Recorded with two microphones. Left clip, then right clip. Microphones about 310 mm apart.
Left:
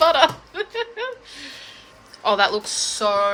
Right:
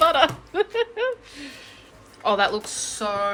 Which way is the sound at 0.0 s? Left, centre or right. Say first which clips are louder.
Left 2 dB; centre.